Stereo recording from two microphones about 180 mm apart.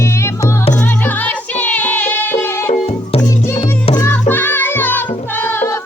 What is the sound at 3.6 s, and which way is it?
Music, 30° left (ahead or behind).